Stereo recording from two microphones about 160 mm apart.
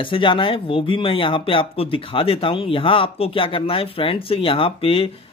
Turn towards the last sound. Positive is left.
turn(degrees=35)  # may be behind; listen again after turning